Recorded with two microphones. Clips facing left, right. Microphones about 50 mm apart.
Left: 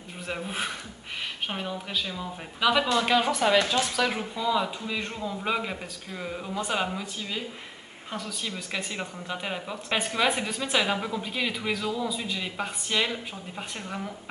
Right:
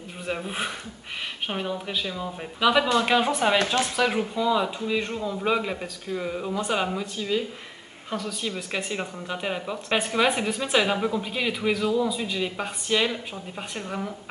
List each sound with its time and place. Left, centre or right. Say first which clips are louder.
0.3 s a woman's voice: right 2 dB; centre
3.3 s speech: even; right
3.9 s a woman's voice: right 3 dB; centre
8.5 s a woman's voice: right 3 dB; centre